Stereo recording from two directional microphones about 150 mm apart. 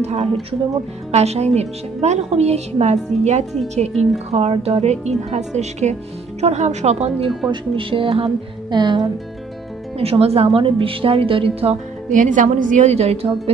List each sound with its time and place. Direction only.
0.0 s a woman's voice: 45° right (ahead or behind)
7.2 s speech: 35° right (ahead or behind)
9.9 s a woman's voice: 40° right (ahead or behind)